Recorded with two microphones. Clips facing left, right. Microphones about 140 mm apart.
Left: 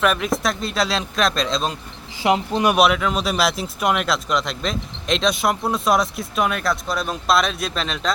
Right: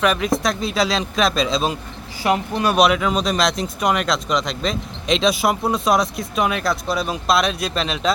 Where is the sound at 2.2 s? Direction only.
20° left (ahead or behind).